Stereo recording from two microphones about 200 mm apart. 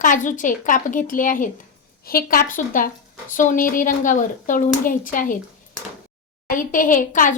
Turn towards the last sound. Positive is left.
turn(degrees=40)  # may be behind; listen again after turning